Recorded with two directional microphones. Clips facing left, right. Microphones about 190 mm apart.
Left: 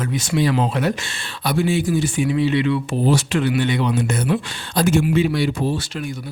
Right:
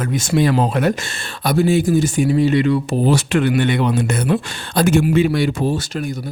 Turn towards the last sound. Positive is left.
turn(degrees=-40)  # may be behind; listen again after turning